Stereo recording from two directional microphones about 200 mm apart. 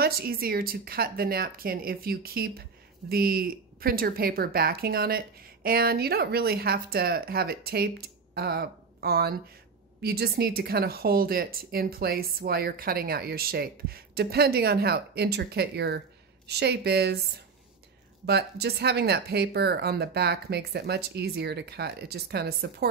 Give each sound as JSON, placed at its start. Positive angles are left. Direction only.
{"t": 0.0, "sound": "a woman's voice", "side_deg": -50}
{"t": 18.2, "sound": "speech", "side_deg": -55}